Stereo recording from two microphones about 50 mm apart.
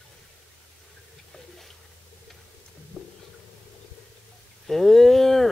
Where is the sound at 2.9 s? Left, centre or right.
Right.